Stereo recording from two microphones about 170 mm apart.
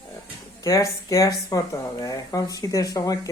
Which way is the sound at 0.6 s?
20° left (ahead or behind).